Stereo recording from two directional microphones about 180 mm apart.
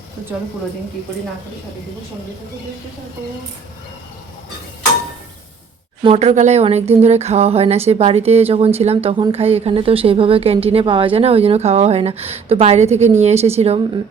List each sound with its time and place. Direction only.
6.0 s a woman's voice: 35° right (ahead or behind)